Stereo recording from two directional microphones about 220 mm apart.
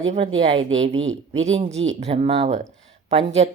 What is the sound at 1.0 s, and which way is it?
Speech, 60° right (ahead or behind).